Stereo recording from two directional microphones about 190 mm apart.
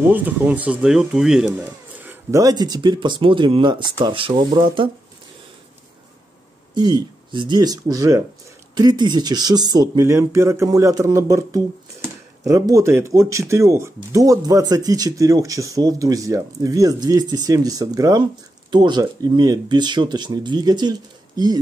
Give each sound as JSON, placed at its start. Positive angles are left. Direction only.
{"t": 0.0, "sound": "speech", "side_deg": -10}
{"t": 6.7, "sound": "speech", "side_deg": -25}